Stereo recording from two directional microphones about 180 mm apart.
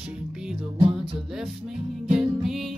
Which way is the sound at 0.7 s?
30° right (ahead or behind).